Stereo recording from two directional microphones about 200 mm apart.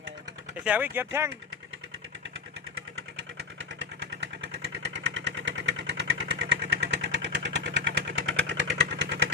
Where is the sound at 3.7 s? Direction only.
65° right (ahead or behind).